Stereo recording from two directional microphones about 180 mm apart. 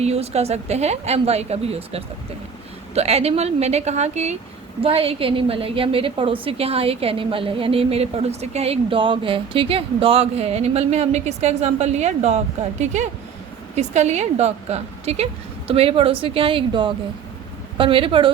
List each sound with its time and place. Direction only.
0.0 s a woman's voice: 35° right (ahead or behind)